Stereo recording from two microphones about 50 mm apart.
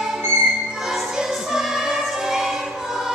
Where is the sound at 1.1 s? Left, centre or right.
Centre.